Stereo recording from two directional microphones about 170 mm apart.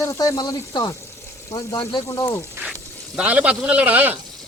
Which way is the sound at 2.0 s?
15° left (ahead or behind).